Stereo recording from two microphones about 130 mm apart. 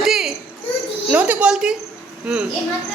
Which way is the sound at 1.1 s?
10° right (ahead or behind).